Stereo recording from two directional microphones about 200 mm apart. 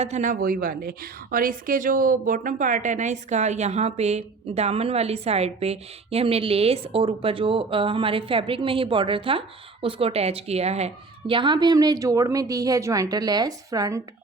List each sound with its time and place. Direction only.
0.0 s a woman's voice: 35° right (ahead or behind); by 14.0 s 15° right (ahead or behind)